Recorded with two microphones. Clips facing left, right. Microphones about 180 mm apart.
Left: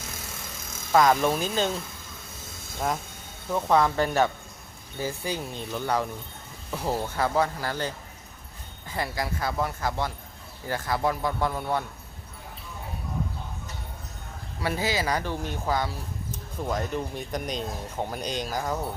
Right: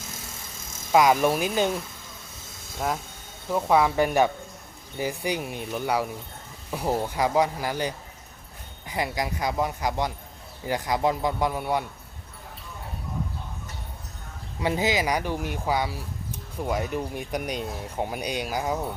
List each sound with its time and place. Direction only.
0.9 s speech: 10° right (ahead or behind)
3.5 s speech: 10° right (ahead or behind)
14.6 s speech: 20° right (ahead or behind)